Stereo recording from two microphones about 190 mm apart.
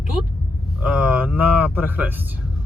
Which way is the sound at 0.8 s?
5° right (ahead or behind).